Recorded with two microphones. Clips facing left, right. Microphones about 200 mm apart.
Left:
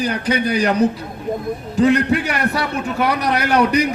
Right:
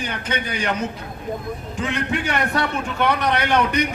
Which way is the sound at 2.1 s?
5° left (ahead or behind).